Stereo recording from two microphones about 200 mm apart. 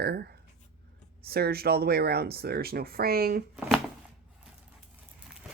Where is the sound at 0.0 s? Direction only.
55° right (ahead or behind).